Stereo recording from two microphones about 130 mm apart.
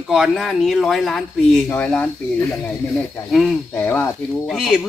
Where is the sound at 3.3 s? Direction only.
Centre (ahead or behind).